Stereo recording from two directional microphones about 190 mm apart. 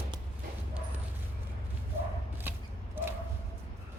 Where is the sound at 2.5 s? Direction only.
10° right (ahead or behind).